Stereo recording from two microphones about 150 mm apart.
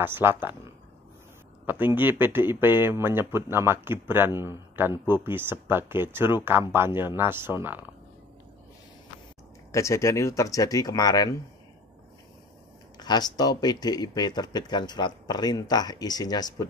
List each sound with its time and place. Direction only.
0.0 s speech: 15° right (ahead or behind)
1.7 s speech: 15° right (ahead or behind)
9.7 s speech: 20° left (ahead or behind)
13.0 s speech: 30° left (ahead or behind)